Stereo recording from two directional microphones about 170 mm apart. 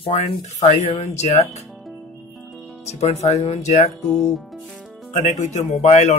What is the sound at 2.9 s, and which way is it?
Speech, 40° left (ahead or behind).